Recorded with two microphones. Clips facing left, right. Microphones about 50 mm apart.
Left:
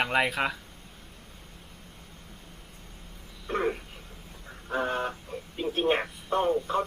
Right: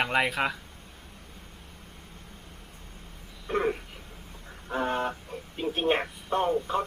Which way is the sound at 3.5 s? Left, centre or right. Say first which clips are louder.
Right 2 dB; centre.